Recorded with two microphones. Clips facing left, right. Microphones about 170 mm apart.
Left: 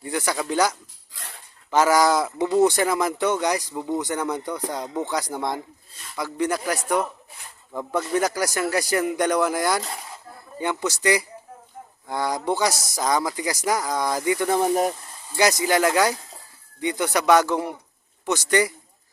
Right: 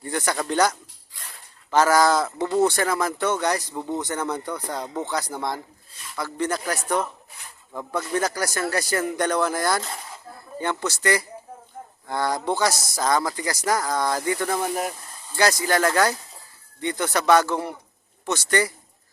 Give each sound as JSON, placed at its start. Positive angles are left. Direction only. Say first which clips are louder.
{"t": 0.0, "sound": "speech", "louder": "even", "side_deg": 5}
{"t": 14.7, "sound": "speech", "louder": "left 6 dB", "side_deg": 35}
{"t": 15.4, "sound": "speech", "louder": "left 1 dB", "side_deg": 15}